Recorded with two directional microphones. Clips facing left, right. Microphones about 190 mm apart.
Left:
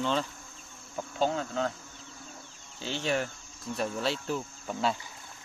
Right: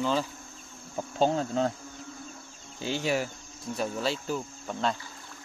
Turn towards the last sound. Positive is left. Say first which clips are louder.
# even
turn(degrees=5)  # may be behind; listen again after turning